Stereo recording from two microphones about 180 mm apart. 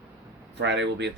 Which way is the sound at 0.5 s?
75° right (ahead or behind).